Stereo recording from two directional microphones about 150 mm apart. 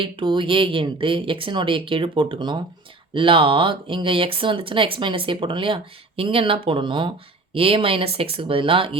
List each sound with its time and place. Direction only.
0.0 s speech: 35° right (ahead or behind)